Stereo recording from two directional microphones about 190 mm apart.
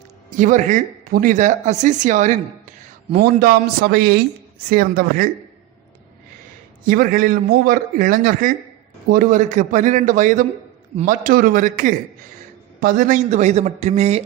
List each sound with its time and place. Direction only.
0.3 s speech: 40° right (ahead or behind)
3.4 s a man's voice: 55° right (ahead or behind)
6.8 s a man's voice: 50° right (ahead or behind)